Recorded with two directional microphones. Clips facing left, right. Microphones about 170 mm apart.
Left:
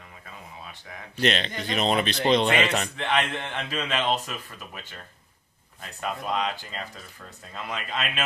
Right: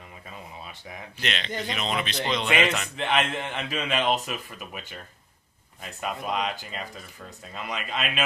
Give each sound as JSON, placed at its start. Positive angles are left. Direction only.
{"t": 1.2, "sound": "speech", "side_deg": 35}
{"t": 3.1, "sound": "speech", "side_deg": -5}
{"t": 5.8, "sound": "speech", "side_deg": -5}